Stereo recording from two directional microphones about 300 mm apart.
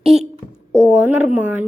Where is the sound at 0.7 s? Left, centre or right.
Right.